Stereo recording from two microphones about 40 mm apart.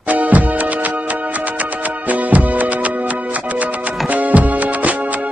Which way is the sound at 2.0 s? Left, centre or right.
Right.